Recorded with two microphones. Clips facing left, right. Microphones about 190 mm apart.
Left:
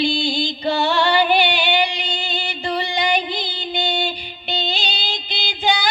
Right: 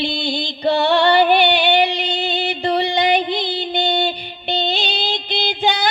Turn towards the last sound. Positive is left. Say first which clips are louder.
# right 2 dB
turn(degrees=-55)  # may be behind; listen again after turning